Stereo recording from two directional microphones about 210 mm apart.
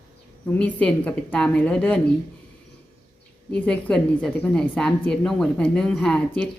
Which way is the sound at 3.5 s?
5° left (ahead or behind).